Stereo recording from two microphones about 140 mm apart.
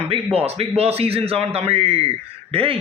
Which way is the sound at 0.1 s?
45° right (ahead or behind).